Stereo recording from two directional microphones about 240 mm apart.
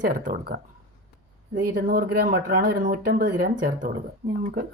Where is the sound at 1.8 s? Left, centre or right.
Right.